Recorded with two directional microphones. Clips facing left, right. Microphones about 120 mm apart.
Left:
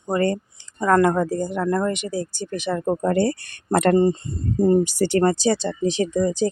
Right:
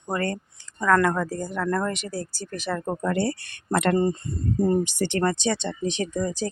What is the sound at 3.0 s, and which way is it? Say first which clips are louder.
Speech: left 5 dB; 40° left (ahead or behind).